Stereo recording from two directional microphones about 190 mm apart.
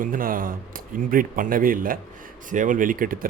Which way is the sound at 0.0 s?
45° right (ahead or behind).